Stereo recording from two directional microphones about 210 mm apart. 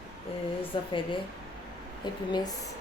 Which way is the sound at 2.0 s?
20° left (ahead or behind).